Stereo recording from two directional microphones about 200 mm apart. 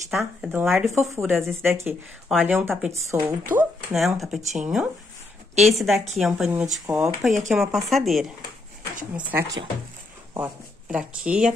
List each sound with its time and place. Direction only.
0.4 s speech: 5° right (ahead or behind)
4.4 s speech: 35° right (ahead or behind)
5.7 s speech: centre (ahead or behind)